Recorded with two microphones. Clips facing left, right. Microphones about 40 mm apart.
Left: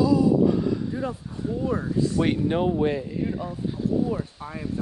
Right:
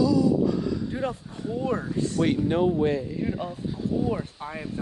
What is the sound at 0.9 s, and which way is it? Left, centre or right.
Speech, right.